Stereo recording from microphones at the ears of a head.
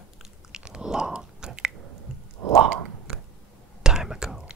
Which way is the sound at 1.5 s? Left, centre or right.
Right.